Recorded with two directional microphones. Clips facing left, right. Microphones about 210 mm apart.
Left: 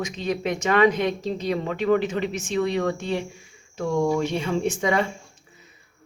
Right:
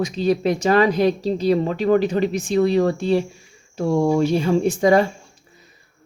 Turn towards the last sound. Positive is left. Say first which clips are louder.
# right 7 dB
turn(degrees=-35)  # may be behind; listen again after turning